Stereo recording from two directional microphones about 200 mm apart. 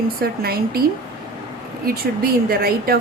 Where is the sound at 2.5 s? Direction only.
50° right (ahead or behind).